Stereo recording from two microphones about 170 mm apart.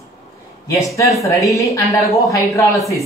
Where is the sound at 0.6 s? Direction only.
20° left (ahead or behind).